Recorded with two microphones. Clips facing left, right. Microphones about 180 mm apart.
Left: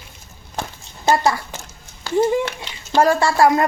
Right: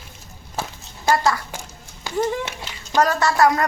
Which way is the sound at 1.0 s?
25° left (ahead or behind).